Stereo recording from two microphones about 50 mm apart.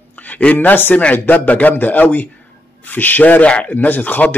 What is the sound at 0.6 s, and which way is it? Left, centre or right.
Speech, left.